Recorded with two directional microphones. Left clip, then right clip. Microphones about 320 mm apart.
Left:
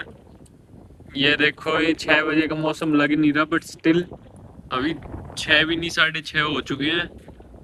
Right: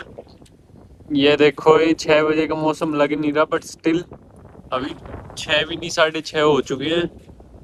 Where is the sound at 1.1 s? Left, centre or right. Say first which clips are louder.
Right 4 dB; centre.